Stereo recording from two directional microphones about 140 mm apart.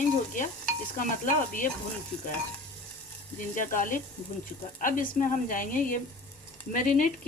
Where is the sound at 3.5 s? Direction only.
70° left (ahead or behind).